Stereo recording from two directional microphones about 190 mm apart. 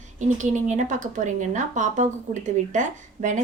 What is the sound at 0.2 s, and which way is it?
Speech, 40° right (ahead or behind).